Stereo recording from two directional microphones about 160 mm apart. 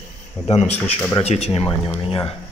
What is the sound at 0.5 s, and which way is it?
Speech, 40° left (ahead or behind).